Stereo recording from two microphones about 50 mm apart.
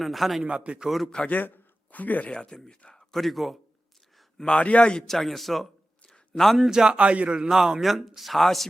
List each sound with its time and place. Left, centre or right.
0.0 s speech: centre
0.4 s a man's voice: right
0.9 s speech: centre
1.3 s speech: left
2.3 s speech: centre
2.9 s speech: centre
4.4 s a man's voice: centre
5.0 s speech: centre
6.1 s a sound: centre
6.7 s speech: centre
6.9 s a man's voice: right
7.4 s speech: centre